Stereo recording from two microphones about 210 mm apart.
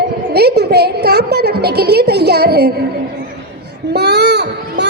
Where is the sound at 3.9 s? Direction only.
50° right (ahead or behind).